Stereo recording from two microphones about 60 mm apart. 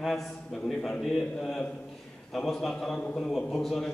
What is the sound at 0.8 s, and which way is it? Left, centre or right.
A man's voice, centre.